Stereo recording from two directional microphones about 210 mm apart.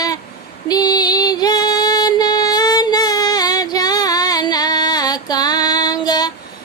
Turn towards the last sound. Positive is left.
turn(degrees=20)  # may be behind; listen again after turning